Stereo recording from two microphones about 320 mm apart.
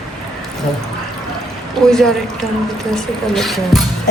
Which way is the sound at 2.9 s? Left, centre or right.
Centre.